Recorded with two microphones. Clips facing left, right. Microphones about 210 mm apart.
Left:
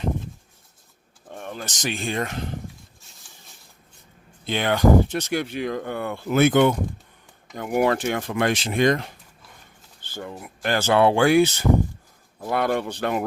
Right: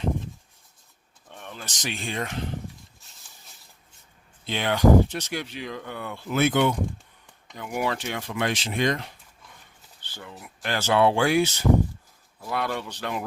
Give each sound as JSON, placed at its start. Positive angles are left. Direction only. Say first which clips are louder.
{"t": 1.3, "sound": "speech", "louder": "left 7 dB", "side_deg": 45}
{"t": 4.4, "sound": "speech", "louder": "left 1 dB", "side_deg": 50}